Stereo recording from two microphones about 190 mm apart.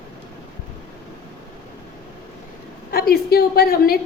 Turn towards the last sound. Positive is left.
turn(degrees=50)  # may be behind; listen again after turning